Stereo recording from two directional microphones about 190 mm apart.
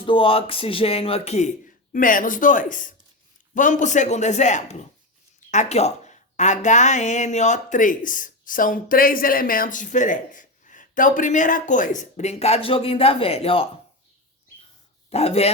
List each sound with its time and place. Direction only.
0.0 s speech: 30° left (ahead or behind)
15.1 s speech: 35° left (ahead or behind)